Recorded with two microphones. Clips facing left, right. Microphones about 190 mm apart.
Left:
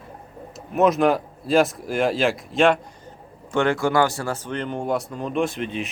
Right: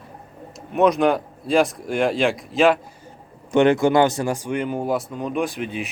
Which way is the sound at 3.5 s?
20° right (ahead or behind).